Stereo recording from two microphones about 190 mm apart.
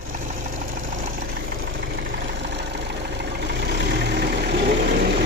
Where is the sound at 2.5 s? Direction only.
60° right (ahead or behind).